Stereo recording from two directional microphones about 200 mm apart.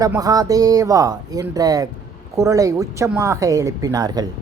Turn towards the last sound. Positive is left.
turn(degrees=-20)  # may be behind; listen again after turning